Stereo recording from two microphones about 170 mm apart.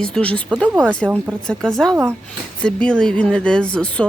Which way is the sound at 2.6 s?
5° left (ahead or behind).